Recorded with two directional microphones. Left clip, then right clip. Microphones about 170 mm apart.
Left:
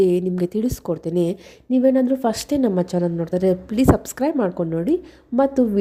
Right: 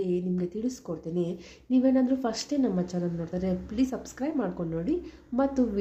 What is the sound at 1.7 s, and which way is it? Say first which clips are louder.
A woman's voice: left 8 dB; 40° left (ahead or behind).